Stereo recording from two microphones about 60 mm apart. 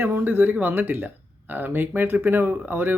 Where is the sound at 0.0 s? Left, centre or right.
Right.